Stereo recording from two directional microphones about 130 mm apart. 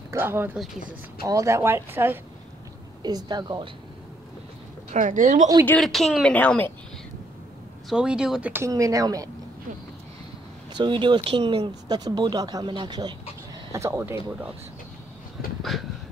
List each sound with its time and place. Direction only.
0.1 s speech: 20° right (ahead or behind)
3.0 s speech: 30° right (ahead or behind)
4.9 s speech: 80° right
5.8 s speech: centre (ahead or behind)
6.3 s a woman's voice: 15° left (ahead or behind)
7.9 s speech: 5° right (ahead or behind)
8.6 s speech: 25° right (ahead or behind)
10.7 s speech: 35° right (ahead or behind)
13.7 s speech: 20° right (ahead or behind)